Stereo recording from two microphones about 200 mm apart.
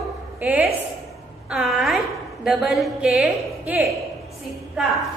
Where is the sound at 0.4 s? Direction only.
10° right (ahead or behind).